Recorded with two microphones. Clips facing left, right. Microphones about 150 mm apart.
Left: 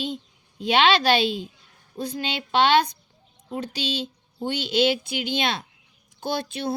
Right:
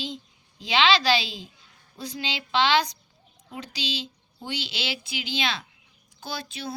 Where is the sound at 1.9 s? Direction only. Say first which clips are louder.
Left 5 dB; 50° left (ahead or behind).